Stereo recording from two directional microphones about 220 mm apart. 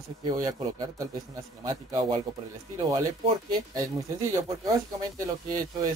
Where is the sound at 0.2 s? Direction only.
15° right (ahead or behind).